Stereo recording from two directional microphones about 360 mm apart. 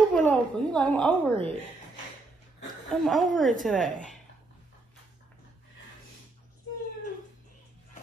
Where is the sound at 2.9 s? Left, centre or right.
Centre.